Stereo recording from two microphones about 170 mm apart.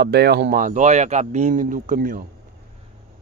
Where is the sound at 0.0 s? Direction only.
75° right (ahead or behind); by 2.2 s 55° right (ahead or behind).